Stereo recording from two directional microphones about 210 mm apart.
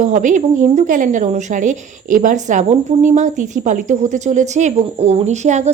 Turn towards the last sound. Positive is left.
turn(degrees=-35)  # may be behind; listen again after turning